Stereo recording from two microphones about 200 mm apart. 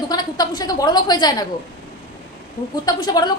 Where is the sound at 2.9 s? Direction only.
20° left (ahead or behind).